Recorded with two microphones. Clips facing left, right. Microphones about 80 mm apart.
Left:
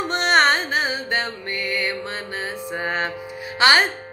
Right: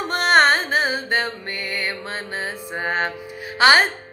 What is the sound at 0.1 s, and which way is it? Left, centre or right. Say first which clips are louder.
Music: right 2 dB; right.